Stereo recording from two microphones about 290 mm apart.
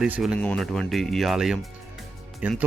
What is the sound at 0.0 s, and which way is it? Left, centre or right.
Speech, centre.